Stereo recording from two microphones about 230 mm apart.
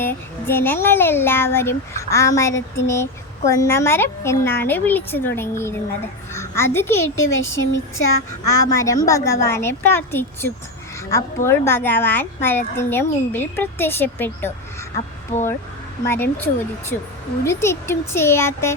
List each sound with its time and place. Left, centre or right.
0.0 s speech: centre
7.5 s a sound: left
8.8 s speech: centre
15.3 s speech: left
16.0 s speech: centre
16.9 s a sound: left
17.4 s speech: centre